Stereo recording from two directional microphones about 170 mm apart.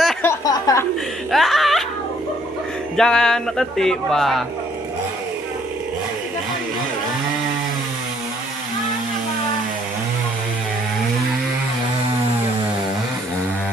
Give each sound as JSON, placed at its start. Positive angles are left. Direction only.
{"t": 0.2, "sound": "a sound", "side_deg": 20}
{"t": 1.3, "sound": "music", "side_deg": 0}
{"t": 3.0, "sound": "a man's voice", "side_deg": 5}